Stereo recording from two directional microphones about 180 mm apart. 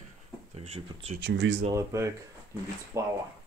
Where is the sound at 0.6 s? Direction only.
35° right (ahead or behind).